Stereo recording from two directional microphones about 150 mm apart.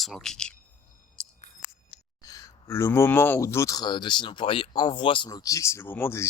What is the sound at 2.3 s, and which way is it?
Speech, 20° left (ahead or behind).